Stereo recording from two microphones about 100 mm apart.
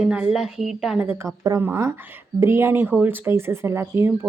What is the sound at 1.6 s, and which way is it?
Speech, 25° right (ahead or behind).